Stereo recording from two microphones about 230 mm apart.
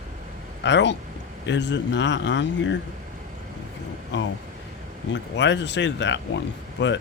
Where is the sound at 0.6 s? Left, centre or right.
Left.